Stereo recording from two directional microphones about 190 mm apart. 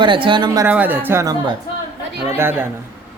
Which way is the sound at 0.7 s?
10° right (ahead or behind).